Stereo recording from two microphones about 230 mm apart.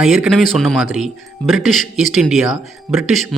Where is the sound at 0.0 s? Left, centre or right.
Centre.